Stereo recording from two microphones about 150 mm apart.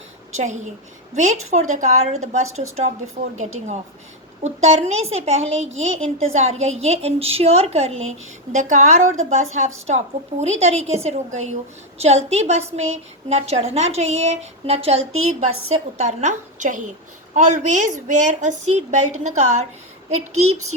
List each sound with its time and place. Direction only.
0.3 s a woman's voice: 50° right (ahead or behind)